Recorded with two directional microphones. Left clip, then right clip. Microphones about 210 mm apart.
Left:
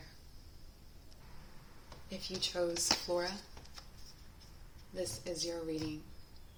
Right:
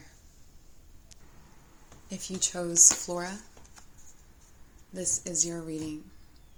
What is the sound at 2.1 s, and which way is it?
Speech, 45° right (ahead or behind).